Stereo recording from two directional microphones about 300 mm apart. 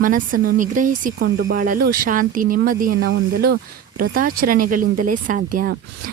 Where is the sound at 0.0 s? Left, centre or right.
Right.